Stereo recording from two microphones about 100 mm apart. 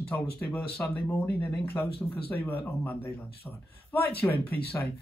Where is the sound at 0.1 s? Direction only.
10° left (ahead or behind).